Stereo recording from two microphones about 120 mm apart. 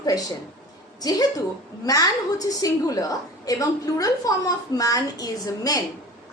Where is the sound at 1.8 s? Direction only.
30° left (ahead or behind).